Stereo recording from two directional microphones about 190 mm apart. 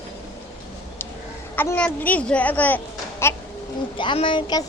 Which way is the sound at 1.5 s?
10° left (ahead or behind).